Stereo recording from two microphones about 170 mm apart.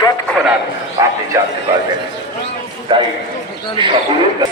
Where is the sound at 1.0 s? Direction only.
25° right (ahead or behind).